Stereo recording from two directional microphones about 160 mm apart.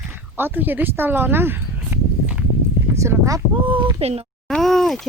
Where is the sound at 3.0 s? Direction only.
20° right (ahead or behind).